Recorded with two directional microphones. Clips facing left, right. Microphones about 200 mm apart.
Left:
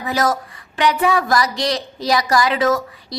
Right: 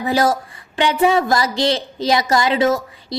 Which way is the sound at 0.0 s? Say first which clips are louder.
Right 3 dB; 30° right (ahead or behind).